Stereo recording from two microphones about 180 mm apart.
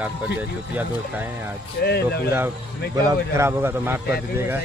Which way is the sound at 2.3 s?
15° right (ahead or behind).